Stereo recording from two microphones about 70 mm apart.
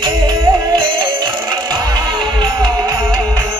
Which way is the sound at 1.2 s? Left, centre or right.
Right.